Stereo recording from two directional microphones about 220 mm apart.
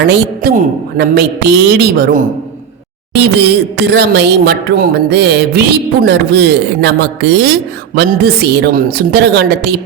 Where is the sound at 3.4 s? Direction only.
50° right (ahead or behind).